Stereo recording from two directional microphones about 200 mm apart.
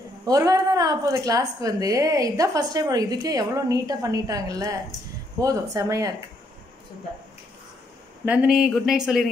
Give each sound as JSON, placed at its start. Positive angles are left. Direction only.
{"t": 0.2, "sound": "a woman's voice", "side_deg": -15}
{"t": 8.3, "sound": "speech", "side_deg": -5}